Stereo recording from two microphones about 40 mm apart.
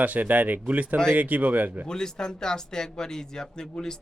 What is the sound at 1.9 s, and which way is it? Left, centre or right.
Speech, centre.